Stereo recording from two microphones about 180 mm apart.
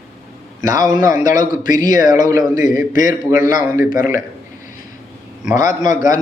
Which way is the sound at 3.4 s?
15° right (ahead or behind).